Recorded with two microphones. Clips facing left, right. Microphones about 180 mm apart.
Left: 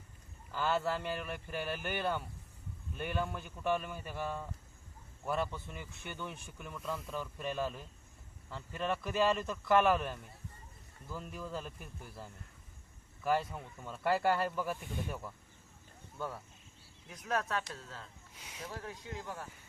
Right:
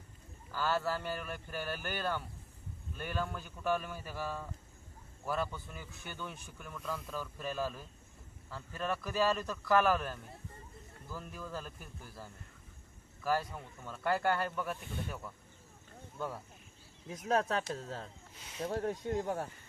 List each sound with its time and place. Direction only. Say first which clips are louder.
0.6 s speech: left 1 dB; centre (ahead or behind)
17.1 s speech: right 4 dB; 30° right (ahead or behind)
17.6 s speech: right 6 dB; 45° right (ahead or behind)
18.6 s speech: right 10 dB; 50° right (ahead or behind)